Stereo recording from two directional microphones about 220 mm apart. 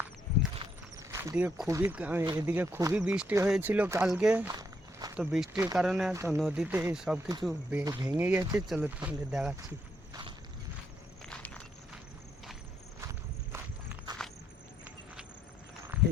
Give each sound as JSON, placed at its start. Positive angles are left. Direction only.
{"t": 0.9, "sound": "speech", "side_deg": -15}
{"t": 4.4, "sound": "walk", "side_deg": -15}
{"t": 5.1, "sound": "speech", "side_deg": -5}
{"t": 11.3, "sound": "walk", "side_deg": 5}
{"t": 13.5, "sound": "walk", "side_deg": -10}
{"t": 15.9, "sound": "a sound", "side_deg": -5}